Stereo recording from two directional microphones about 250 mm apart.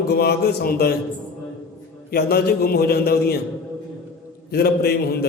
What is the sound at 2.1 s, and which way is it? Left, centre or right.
A man's voice, left.